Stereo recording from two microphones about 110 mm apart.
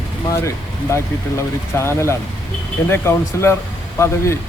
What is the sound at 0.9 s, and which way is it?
Speech, 25° left (ahead or behind).